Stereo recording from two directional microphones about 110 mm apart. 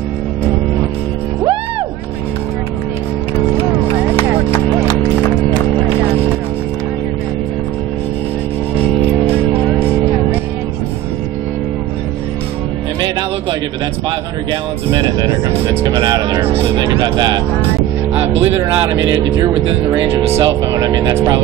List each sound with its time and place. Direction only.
9.3 s music: 15° right (ahead or behind)
14.5 s speech: 45° right (ahead or behind)
18.4 s speech: 20° right (ahead or behind)
19.1 s speech: 30° right (ahead or behind)
19.9 s speech: 15° right (ahead or behind)
20.2 s speech: 60° right (ahead or behind)
20.4 s speech: 35° right (ahead or behind)